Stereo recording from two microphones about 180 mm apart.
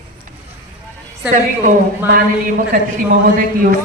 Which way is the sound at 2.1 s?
50° right (ahead or behind).